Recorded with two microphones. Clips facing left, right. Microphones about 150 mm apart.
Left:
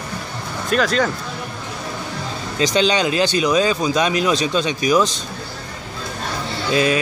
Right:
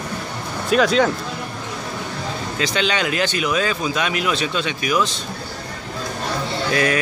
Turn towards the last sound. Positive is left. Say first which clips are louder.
# left 2 dB
turn(degrees=20)  # may be behind; listen again after turning